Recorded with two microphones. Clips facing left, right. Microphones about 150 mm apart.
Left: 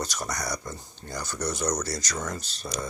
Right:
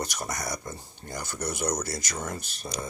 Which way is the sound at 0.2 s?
25° right (ahead or behind).